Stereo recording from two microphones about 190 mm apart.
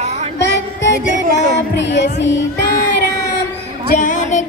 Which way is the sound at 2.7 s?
60° left (ahead or behind).